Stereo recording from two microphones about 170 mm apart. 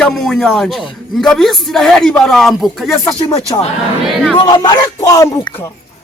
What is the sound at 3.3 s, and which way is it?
Speech, 35° left (ahead or behind).